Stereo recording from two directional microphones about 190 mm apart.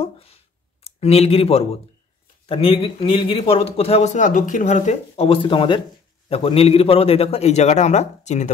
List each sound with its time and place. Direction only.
0.0 s a man's voice: 30° left (ahead or behind)